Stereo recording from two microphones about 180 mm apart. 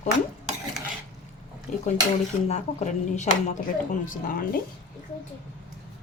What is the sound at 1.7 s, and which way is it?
Speech, 40° left (ahead or behind).